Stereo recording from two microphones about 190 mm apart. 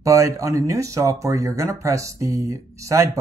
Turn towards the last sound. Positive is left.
turn(degrees=-15)  # may be behind; listen again after turning